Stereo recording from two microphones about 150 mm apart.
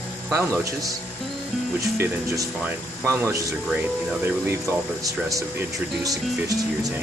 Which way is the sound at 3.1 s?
15° right (ahead or behind).